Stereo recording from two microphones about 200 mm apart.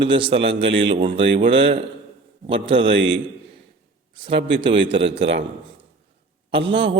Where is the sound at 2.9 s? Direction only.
70° right (ahead or behind).